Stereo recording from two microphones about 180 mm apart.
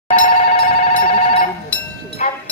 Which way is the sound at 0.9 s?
50° left (ahead or behind).